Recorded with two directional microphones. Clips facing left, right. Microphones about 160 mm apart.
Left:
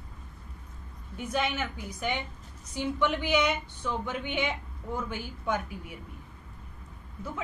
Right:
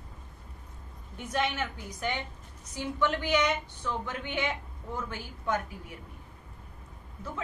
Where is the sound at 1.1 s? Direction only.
5° left (ahead or behind).